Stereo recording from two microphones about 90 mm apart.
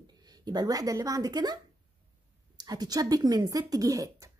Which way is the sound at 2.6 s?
45° right (ahead or behind).